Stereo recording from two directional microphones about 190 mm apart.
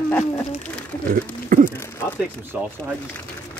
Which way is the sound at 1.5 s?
45° right (ahead or behind).